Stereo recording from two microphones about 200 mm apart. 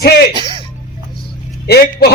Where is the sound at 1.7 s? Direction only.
50° left (ahead or behind).